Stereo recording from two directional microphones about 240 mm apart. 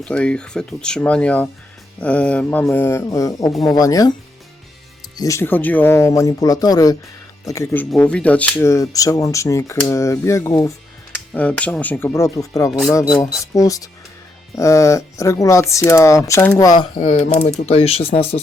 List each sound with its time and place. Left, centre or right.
0.0 s speech: centre
5.1 s speech: centre
16.7 s speech: left